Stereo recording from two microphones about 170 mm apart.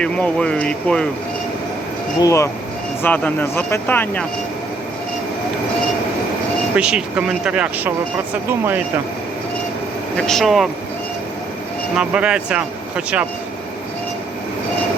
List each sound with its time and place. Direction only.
0.0 s speech: 5° left (ahead or behind)
2.2 s speech: 15° left (ahead or behind)
6.7 s speech: 5° right (ahead or behind)
10.2 s speech: 5° left (ahead or behind)
11.9 s speech: 5° right (ahead or behind)